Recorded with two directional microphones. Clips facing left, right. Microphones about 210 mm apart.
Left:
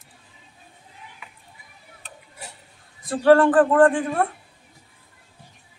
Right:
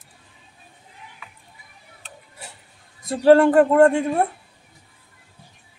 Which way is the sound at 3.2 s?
25° right (ahead or behind).